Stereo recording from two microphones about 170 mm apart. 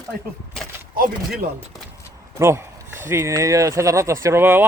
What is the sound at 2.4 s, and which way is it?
Speech, 15° right (ahead or behind).